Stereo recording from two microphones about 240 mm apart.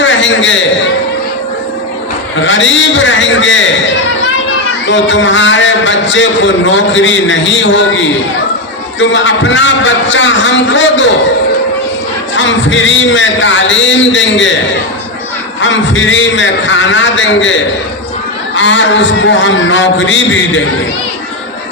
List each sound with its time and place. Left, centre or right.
0.0 s a sound: left
2.4 s a man's voice: left
4.9 s a man's voice: left
12.4 s a man's voice: left
15.6 s a man's voice: left